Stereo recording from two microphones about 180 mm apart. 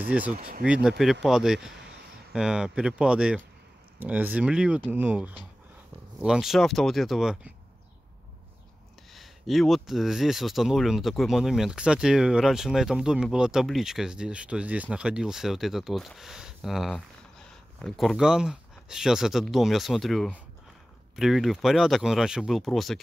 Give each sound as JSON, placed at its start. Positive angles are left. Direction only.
{"t": 0.0, "sound": "speech", "side_deg": -10}
{"t": 0.4, "sound": "speech", "side_deg": -60}
{"t": 0.7, "sound": "speech", "side_deg": 0}
{"t": 9.1, "sound": "speech", "side_deg": 0}